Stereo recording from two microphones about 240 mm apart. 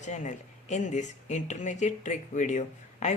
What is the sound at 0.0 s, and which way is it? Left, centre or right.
A man's voice, left.